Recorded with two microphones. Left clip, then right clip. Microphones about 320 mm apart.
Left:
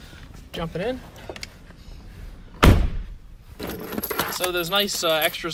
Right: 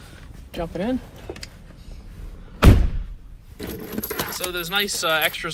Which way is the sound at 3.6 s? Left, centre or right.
Centre.